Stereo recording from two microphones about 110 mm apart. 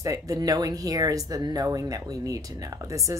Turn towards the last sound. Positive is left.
turn(degrees=-30)  # may be behind; listen again after turning